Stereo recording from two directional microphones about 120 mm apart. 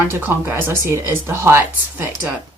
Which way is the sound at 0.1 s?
20° right (ahead or behind).